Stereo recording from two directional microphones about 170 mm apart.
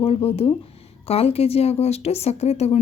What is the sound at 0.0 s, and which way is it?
A woman's voice, 35° left (ahead or behind).